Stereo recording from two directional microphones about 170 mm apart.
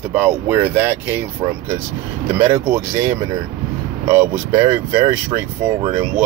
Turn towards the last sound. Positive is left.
turn(degrees=-20)  # may be behind; listen again after turning